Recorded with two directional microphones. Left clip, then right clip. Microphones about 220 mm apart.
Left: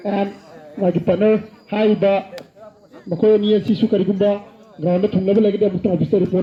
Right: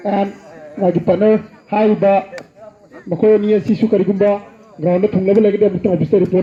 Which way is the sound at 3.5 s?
15° left (ahead or behind).